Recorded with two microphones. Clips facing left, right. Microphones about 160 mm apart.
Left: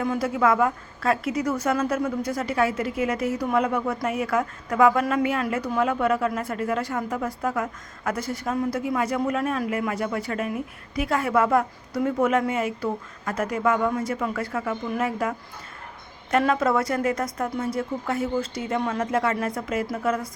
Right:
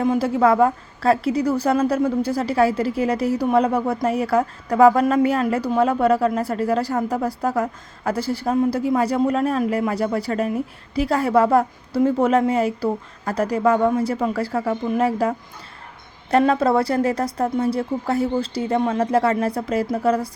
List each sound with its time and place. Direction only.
0.0 s a woman's voice: 25° right (ahead or behind)
16.4 s a woman's voice: 35° right (ahead or behind)